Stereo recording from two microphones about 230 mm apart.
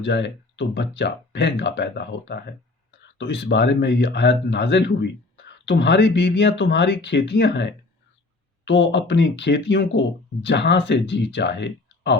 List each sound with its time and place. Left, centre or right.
0.0 s speech: left